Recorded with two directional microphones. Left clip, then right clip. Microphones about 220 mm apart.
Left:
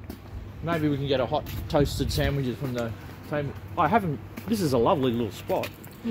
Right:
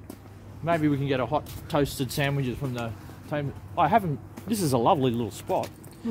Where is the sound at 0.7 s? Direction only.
40° right (ahead or behind).